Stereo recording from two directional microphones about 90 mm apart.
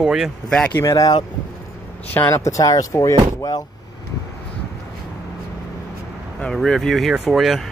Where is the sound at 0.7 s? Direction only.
40° left (ahead or behind).